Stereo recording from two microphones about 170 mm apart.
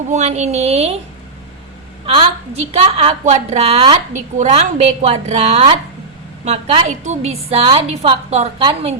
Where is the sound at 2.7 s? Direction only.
35° right (ahead or behind).